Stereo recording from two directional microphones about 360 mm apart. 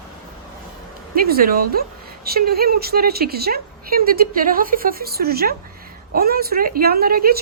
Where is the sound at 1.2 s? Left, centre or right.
Right.